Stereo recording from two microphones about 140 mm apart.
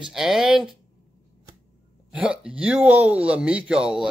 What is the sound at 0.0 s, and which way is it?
Speech, centre (ahead or behind).